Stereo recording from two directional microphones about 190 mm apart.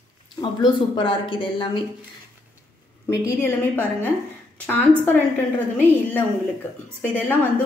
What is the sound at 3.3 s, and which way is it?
Speech, 15° left (ahead or behind).